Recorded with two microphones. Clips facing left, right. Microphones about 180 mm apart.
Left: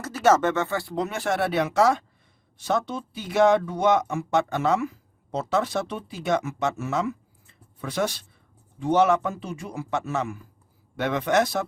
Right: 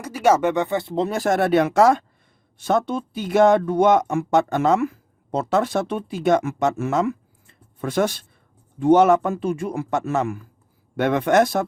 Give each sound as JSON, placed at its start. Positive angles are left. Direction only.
{"t": 0.0, "sound": "speech", "side_deg": -10}